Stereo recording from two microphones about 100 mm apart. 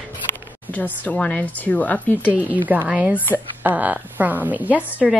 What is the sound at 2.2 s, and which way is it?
A woman's voice, 15° right (ahead or behind).